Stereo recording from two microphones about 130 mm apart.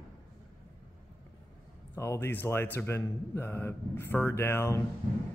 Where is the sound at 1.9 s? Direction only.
20° left (ahead or behind).